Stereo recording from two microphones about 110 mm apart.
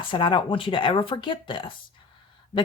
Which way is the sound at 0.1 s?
45° left (ahead or behind).